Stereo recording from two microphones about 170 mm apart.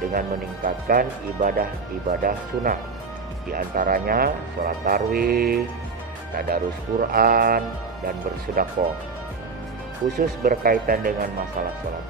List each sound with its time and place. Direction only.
0.1 s speech: 55° right (ahead or behind)
8.8 s speech: 50° right (ahead or behind)
10.1 s speech: 60° right (ahead or behind)